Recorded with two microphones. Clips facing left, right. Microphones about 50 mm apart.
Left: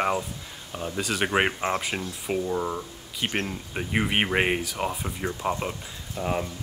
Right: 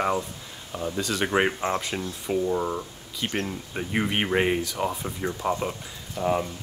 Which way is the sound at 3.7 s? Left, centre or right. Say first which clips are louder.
Left 1 dB; centre.